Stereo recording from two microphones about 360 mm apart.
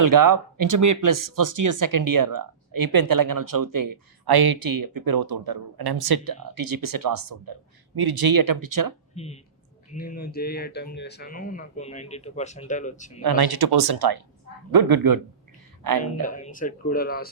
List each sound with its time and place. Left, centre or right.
0.0 s speech: right
7.9 s speech: right
9.1 s speech: centre
13.2 s speech: right
16.2 s speech: left